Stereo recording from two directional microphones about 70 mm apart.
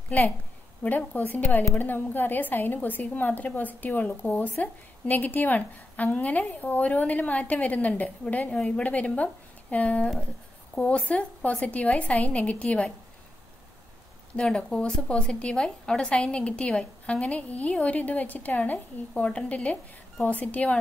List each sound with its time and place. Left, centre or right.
0.1 s a woman's voice: left
14.4 s a woman's voice: centre